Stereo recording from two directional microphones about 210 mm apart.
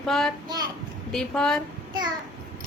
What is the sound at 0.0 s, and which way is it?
Speech, centre (ahead or behind).